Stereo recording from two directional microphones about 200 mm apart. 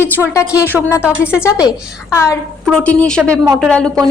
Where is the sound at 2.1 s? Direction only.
15° left (ahead or behind).